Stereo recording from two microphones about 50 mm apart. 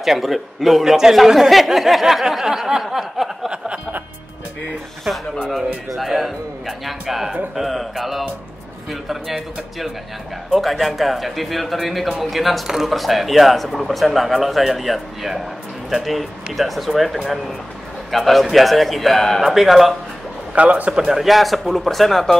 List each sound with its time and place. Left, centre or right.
0.0 s speech: centre
3.4 s a sound: right
5.1 s speech: centre
20.5 s a man's voice: right
20.9 s speech: centre
21.2 s speech: centre